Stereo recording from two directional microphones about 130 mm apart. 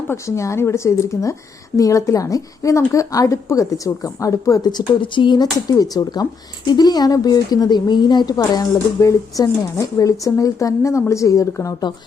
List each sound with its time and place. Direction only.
0.1 s a woman's voice: 20° left (ahead or behind)